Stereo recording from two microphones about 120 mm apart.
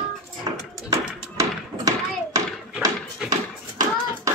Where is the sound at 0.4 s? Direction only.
30° right (ahead or behind).